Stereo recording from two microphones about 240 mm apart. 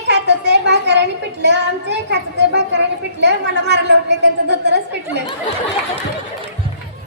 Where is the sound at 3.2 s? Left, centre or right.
Right.